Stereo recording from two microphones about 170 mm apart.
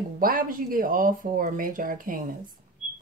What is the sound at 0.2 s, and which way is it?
Speech, 55° right (ahead or behind).